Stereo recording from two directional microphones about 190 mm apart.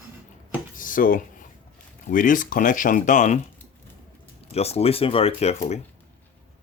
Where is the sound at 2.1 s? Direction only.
45° left (ahead or behind).